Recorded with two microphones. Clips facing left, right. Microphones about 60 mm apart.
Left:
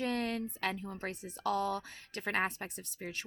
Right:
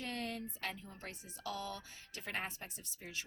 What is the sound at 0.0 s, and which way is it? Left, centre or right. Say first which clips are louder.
Speech: left 8 dB; left.